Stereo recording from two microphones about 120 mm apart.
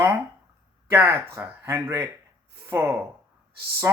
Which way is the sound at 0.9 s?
20° right (ahead or behind).